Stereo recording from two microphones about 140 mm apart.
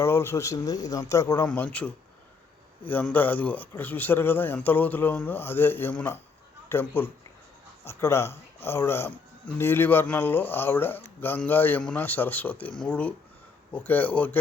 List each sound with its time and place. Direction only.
0.0 s speech: 20° left (ahead or behind)
1.5 s speech: 10° left (ahead or behind)